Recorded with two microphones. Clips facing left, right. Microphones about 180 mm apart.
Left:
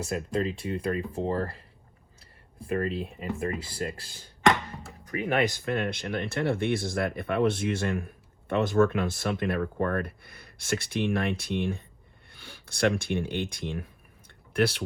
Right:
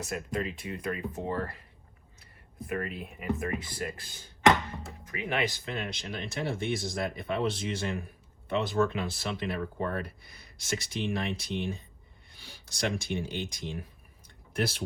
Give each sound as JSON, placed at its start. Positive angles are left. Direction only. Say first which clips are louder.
{"t": 0.0, "sound": "speech", "louder": "left 5 dB", "side_deg": 30}